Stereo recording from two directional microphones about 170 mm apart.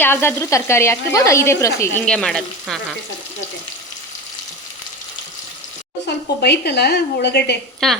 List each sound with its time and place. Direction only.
0.0 s speech: 15° left (ahead or behind)
2.0 s speech: 5° left (ahead or behind)
6.1 s a woman's voice: 80° left
7.8 s speech: centre (ahead or behind)